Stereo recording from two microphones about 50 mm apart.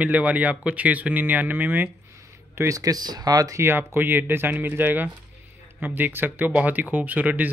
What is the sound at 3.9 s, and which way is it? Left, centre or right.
Speech, right.